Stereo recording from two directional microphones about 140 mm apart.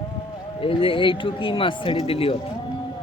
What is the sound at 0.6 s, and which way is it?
Speech, 40° left (ahead or behind).